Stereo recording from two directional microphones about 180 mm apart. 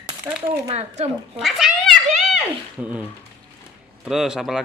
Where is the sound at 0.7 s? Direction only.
35° right (ahead or behind).